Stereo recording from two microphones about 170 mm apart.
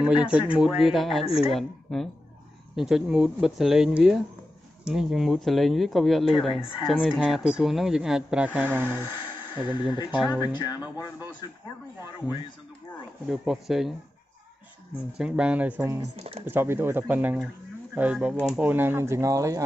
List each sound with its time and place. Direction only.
0.0 s speech: 5° right (ahead or behind)
9.2 s a sound: 25° left (ahead or behind)
10.1 s speech: 10° right (ahead or behind)
10.4 s speech: 25° left (ahead or behind)
13.3 s speech: centre (ahead or behind)
15.1 s speech: 5° right (ahead or behind)
18.3 s speech: 10° left (ahead or behind)
18.6 s speech: 10° right (ahead or behind)